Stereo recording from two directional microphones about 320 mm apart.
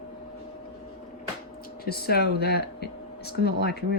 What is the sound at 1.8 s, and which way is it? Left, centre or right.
Speech, left.